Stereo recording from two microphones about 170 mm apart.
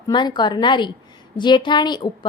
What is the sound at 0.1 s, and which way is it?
A woman's voice, 25° left (ahead or behind).